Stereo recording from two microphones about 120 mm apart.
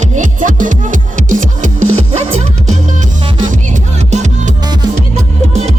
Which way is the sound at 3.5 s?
80° right.